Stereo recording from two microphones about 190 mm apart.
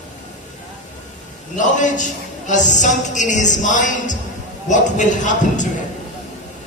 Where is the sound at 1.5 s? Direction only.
40° left (ahead or behind).